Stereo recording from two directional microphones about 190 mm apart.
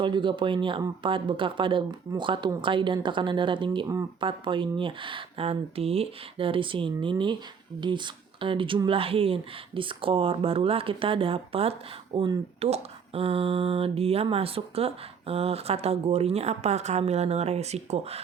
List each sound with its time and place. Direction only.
0.0 s speech: 25° right (ahead or behind)